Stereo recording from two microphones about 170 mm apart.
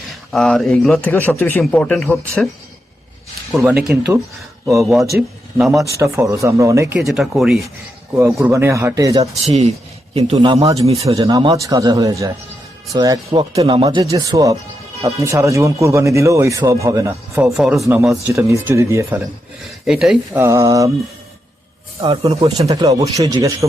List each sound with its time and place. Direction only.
0.3 s a man's voice: centre (ahead or behind)
3.9 s a man's voice: 5° right (ahead or behind)
6.0 s speech: 15° right (ahead or behind)
7.2 s a man's voice: centre (ahead or behind)
8.1 s speech: 15° right (ahead or behind)
9.4 s a man's voice: 40° right (ahead or behind)
10.8 s a man's voice: 35° right (ahead or behind)
11.1 s speech: 20° right (ahead or behind)
14.1 s speech: 20° right (ahead or behind)
17.4 s a man's voice: 5° right (ahead or behind)
19.8 s a man's voice: 5° right (ahead or behind)
20.4 s speech: 20° right (ahead or behind)
22.4 s speech: 20° right (ahead or behind)